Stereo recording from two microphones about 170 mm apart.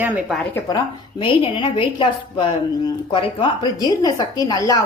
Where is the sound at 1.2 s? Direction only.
30° left (ahead or behind).